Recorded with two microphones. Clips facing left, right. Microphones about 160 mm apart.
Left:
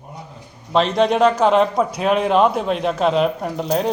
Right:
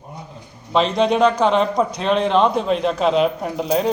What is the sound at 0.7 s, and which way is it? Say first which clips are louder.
A man's voice: left 1 dB; centre (ahead or behind).